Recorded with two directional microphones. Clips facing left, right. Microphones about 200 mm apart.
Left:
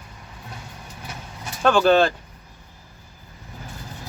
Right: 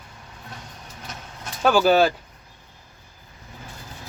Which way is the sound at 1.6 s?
5° right (ahead or behind).